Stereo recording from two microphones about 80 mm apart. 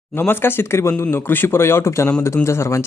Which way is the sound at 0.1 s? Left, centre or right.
Left.